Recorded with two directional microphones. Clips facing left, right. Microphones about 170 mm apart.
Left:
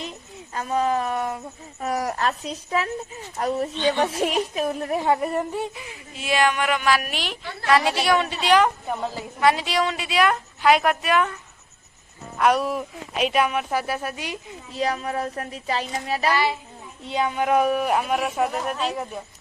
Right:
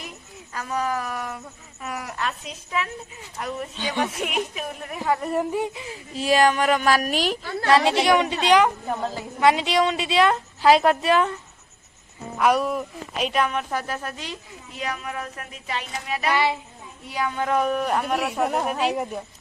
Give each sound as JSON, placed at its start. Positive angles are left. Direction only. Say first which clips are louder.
{"t": 0.5, "sound": "speech", "louder": "left 4 dB", "side_deg": 25}
{"t": 1.8, "sound": "speech", "louder": "left 6 dB", "side_deg": 40}
{"t": 3.8, "sound": "speech", "louder": "left 4 dB", "side_deg": -10}
{"t": 4.0, "sound": "speech", "louder": "left 4 dB", "side_deg": 30}
{"t": 5.2, "sound": "speech", "louder": "even", "side_deg": 0}
{"t": 5.5, "sound": "speech", "louder": "right 2 dB", "side_deg": -15}
{"t": 5.8, "sound": "a woman's voice", "louder": "right 6 dB", "side_deg": -35}
{"t": 7.7, "sound": "a woman's voice", "louder": "right 2 dB", "side_deg": -25}
{"t": 12.4, "sound": "a woman's voice", "louder": "even", "side_deg": 0}
{"t": 14.8, "sound": "speech", "louder": "left 6 dB", "side_deg": 35}
{"t": 16.3, "sound": "a woman's voice", "louder": "right 2 dB", "side_deg": -20}
{"t": 17.1, "sound": "a woman's voice", "louder": "left 3 dB", "side_deg": 20}
{"t": 18.7, "sound": "speech", "louder": "right 3 dB", "side_deg": -10}